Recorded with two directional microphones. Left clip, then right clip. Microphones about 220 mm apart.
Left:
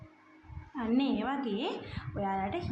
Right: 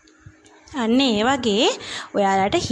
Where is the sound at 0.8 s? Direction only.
45° right (ahead or behind).